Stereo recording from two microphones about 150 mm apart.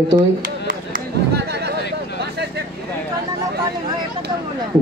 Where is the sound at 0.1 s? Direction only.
65° right (ahead or behind); by 1.8 s 90° right.